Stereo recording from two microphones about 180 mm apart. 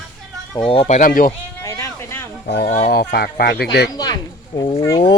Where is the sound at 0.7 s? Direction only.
35° left (ahead or behind).